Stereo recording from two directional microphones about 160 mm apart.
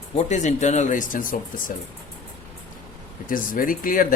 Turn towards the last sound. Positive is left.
turn(degrees=60)  # may be behind; listen again after turning